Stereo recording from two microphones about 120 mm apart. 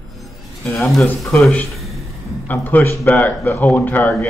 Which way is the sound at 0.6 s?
20° left (ahead or behind).